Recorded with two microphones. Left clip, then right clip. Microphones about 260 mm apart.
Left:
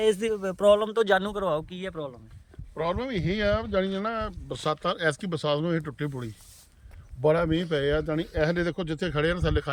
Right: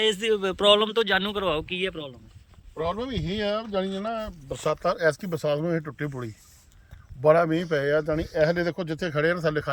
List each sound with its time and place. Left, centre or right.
0.0 s a man's voice: left
2.7 s a man's voice: centre
5.1 s a man's voice: centre